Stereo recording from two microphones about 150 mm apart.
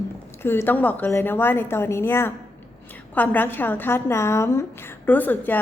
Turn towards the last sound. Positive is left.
turn(degrees=10)  # may be behind; listen again after turning